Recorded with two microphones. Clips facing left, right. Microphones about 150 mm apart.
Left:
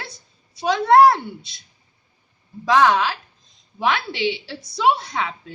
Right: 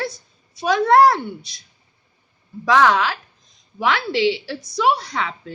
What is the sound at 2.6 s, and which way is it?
A woman's voice, 20° left (ahead or behind).